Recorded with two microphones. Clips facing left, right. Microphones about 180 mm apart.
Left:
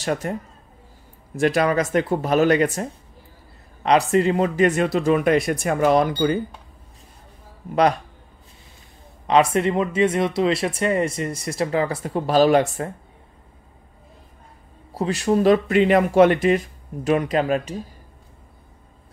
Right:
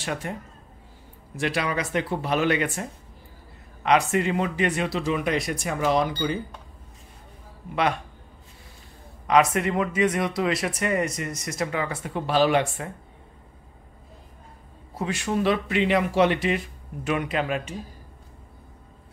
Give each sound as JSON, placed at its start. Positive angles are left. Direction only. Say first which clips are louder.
{"t": 0.0, "sound": "speech", "louder": "left 6 dB", "side_deg": 45}
{"t": 7.7, "sound": "speech", "louder": "left 6 dB", "side_deg": 40}
{"t": 9.3, "sound": "speech", "louder": "left 3 dB", "side_deg": 30}
{"t": 15.0, "sound": "speech", "louder": "left 6 dB", "side_deg": 35}